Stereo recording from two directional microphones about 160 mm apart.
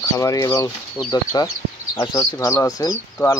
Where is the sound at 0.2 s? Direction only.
20° left (ahead or behind).